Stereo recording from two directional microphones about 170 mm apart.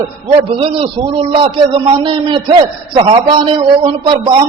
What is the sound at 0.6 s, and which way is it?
A man's voice, 30° right (ahead or behind).